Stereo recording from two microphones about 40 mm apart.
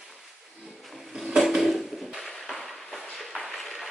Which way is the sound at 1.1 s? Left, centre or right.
Centre.